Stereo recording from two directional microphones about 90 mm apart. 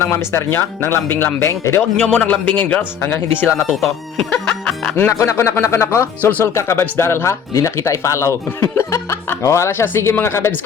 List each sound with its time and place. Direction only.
0.0 s speech: 30° left (ahead or behind)
2.0 s speech: 10° left (ahead or behind)
3.5 s speech: centre (ahead or behind)
4.9 s speech: 30° left (ahead or behind)